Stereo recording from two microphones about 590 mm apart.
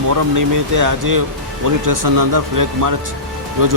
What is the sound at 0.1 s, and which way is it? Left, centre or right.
Speech, right.